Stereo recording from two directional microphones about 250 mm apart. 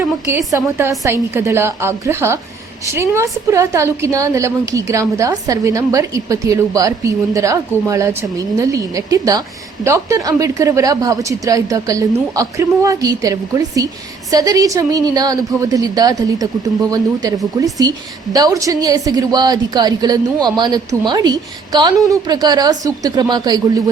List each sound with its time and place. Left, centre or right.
0.0 s a woman's voice: centre